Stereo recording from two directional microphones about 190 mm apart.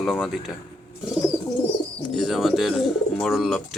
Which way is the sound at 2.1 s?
Centre (ahead or behind).